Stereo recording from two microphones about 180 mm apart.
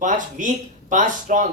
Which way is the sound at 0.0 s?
45° right (ahead or behind).